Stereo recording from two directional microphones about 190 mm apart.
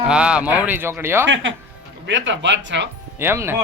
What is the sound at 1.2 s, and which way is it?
Speech, 75° right (ahead or behind).